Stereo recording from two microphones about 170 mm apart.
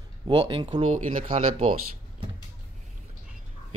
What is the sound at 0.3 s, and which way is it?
Speech, 35° right (ahead or behind).